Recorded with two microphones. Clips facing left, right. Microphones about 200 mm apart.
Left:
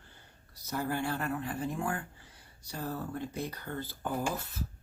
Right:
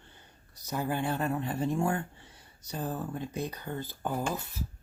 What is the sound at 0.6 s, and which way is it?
Speech, 15° right (ahead or behind).